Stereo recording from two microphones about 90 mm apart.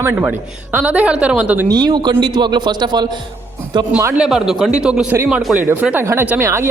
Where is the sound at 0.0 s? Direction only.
25° right (ahead or behind).